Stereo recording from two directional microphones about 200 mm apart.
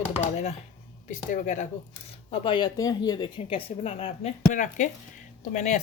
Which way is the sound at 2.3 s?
25° left (ahead or behind).